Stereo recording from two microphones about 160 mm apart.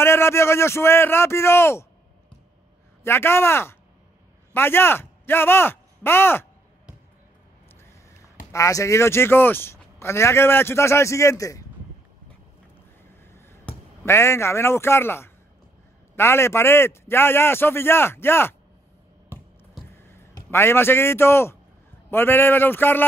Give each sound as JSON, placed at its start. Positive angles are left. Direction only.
{"t": 0.0, "sound": "a man's voice", "side_deg": 15}
{"t": 8.5, "sound": "speech", "side_deg": 20}
{"t": 13.2, "sound": "a sound", "side_deg": 15}
{"t": 16.2, "sound": "speech", "side_deg": 15}
{"t": 19.3, "sound": "a sound", "side_deg": -15}
{"t": 20.0, "sound": "a man's voice", "side_deg": 15}